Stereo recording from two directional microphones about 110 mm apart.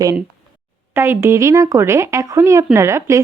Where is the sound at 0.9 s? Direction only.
20° right (ahead or behind).